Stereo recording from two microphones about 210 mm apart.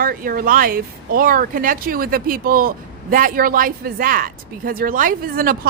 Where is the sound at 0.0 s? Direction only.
45° right (ahead or behind).